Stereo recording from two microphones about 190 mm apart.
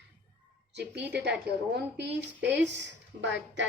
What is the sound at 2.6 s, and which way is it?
A woman's voice, 65° right (ahead or behind).